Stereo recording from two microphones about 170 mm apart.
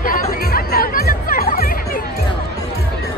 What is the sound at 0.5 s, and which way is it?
Music, 60° left (ahead or behind).